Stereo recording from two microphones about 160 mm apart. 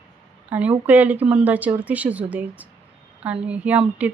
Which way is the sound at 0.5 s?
10° right (ahead or behind).